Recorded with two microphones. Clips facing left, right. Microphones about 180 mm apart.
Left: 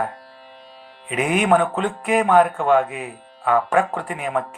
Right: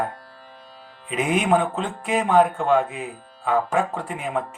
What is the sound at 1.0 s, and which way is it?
Speech, 60° left (ahead or behind).